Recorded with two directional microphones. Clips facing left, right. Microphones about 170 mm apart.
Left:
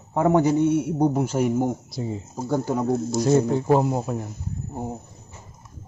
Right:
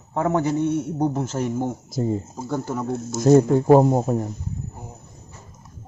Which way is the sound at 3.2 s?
45° right (ahead or behind).